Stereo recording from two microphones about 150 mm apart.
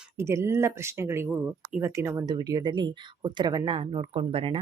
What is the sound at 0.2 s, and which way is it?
Speech, 20° right (ahead or behind).